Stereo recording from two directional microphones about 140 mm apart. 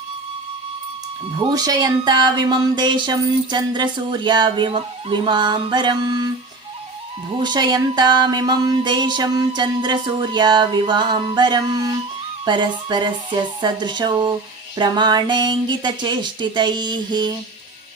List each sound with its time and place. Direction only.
1.5 s speech: 30° right (ahead or behind)
7.3 s speech: 30° right (ahead or behind)